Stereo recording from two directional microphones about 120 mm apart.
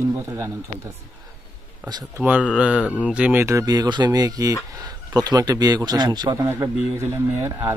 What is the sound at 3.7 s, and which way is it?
A man's voice, 35° right (ahead or behind).